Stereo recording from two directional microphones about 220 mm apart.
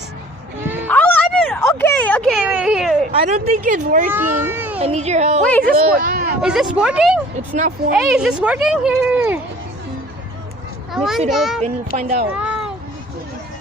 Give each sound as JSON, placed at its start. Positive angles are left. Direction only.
{"t": 0.9, "sound": "a sound", "side_deg": 5}
{"t": 3.2, "sound": "speech", "side_deg": -30}
{"t": 4.1, "sound": "speech", "side_deg": -10}
{"t": 4.8, "sound": "speech", "side_deg": -30}
{"t": 5.4, "sound": "speech", "side_deg": 5}
{"t": 5.9, "sound": "a sound", "side_deg": -40}
{"t": 6.4, "sound": "speech", "side_deg": -5}
{"t": 7.3, "sound": "speech", "side_deg": -35}
{"t": 7.9, "sound": "speech", "side_deg": -5}
{"t": 10.9, "sound": "speech", "side_deg": 0}
{"t": 11.6, "sound": "speech", "side_deg": -30}
{"t": 12.3, "sound": "a sound", "side_deg": -5}